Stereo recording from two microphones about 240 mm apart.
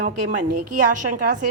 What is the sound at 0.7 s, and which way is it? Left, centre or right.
Speech, right.